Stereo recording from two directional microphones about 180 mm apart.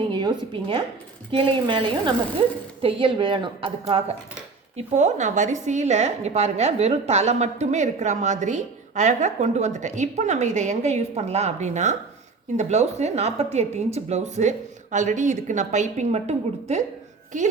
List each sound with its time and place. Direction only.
0.1 s a woman's voice: 25° right (ahead or behind)